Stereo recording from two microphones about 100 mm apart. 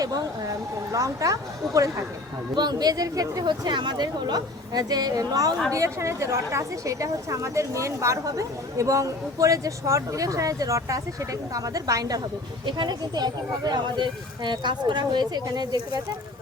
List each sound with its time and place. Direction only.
0.0 s speech: 35° right (ahead or behind)
2.6 s a woman's voice: 45° right (ahead or behind)
12.6 s speech: 50° right (ahead or behind)